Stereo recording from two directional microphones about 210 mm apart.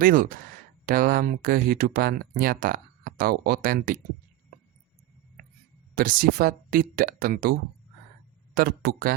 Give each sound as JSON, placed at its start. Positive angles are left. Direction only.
{"t": 0.0, "sound": "speech", "side_deg": -40}
{"t": 6.0, "sound": "speech", "side_deg": -45}
{"t": 8.5, "sound": "speech", "side_deg": -45}